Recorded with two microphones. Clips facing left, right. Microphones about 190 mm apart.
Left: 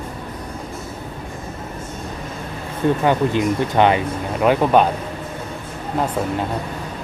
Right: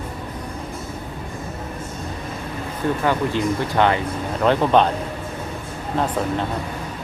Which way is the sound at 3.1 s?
15° left (ahead or behind).